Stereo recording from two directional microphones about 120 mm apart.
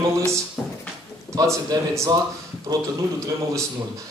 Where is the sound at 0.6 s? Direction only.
Centre (ahead or behind).